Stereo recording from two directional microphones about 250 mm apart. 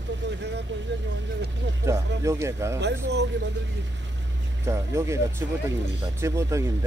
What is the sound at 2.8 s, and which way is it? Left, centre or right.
Speech, right.